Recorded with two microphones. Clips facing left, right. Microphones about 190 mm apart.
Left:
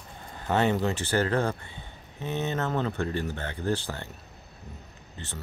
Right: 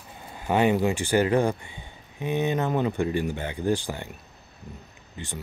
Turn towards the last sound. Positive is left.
turn(degrees=-15)  # may be behind; listen again after turning